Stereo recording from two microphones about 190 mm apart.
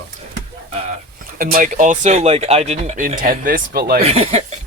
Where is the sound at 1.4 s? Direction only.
45° right (ahead or behind).